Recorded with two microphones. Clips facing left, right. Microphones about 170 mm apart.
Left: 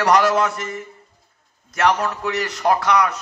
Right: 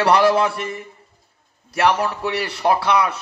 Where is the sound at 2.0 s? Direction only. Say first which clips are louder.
Right 1 dB; 30° right (ahead or behind).